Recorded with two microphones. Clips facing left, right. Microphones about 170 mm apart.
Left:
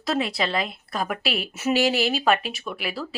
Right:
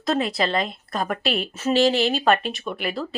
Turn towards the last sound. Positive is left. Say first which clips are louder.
# right 3 dB
turn(degrees=5)  # may be behind; listen again after turning